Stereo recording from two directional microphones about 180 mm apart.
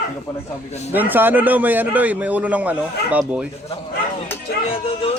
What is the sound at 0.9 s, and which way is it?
A man's voice, 10° right (ahead or behind).